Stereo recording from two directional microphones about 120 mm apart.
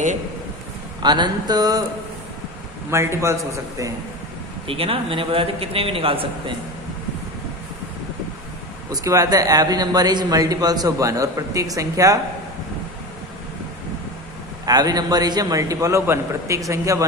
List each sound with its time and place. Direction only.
1.0 s a man's voice: 40° right (ahead or behind)
2.9 s a man's voice: 25° right (ahead or behind)
4.6 s a man's voice: 50° right (ahead or behind)
8.9 s a man's voice: 30° right (ahead or behind)
14.7 s a man's voice: 35° right (ahead or behind)